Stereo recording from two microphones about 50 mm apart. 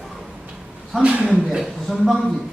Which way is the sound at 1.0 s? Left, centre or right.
Right.